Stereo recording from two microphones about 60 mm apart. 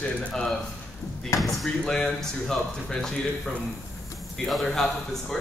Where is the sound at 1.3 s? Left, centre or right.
Left.